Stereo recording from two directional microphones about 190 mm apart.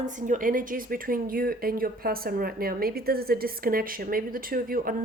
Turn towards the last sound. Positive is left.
turn(degrees=-50)  # may be behind; listen again after turning